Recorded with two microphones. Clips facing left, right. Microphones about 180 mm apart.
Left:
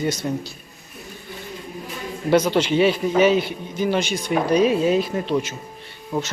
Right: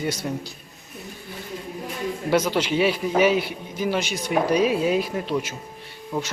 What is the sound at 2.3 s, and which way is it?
A man's voice, 5° right (ahead or behind).